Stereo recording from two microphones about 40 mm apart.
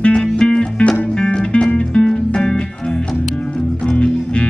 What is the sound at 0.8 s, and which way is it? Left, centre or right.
Music, left.